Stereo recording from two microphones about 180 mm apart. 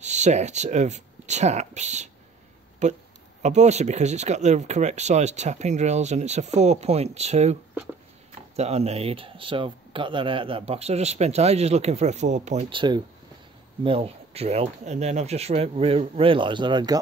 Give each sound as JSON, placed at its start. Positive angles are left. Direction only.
{"t": 0.0, "sound": "speech", "side_deg": -40}
{"t": 8.5, "sound": "speech", "side_deg": -35}
{"t": 12.6, "sound": "speech", "side_deg": -25}